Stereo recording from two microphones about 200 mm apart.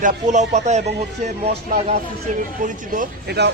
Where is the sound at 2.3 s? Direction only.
35° right (ahead or behind).